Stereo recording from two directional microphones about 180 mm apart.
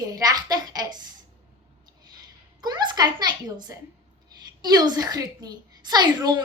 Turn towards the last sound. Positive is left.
turn(degrees=-25)  # may be behind; listen again after turning